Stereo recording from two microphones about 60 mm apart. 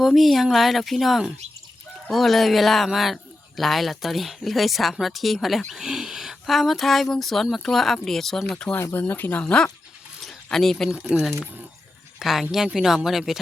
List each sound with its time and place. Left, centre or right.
0.0 s speech: centre
9.0 s speech: left; by 9.7 s centre
10.2 s speech: centre
10.9 s speech: centre
12.2 s speech: centre